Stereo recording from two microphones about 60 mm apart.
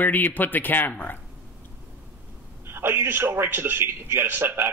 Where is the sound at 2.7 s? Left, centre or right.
Right.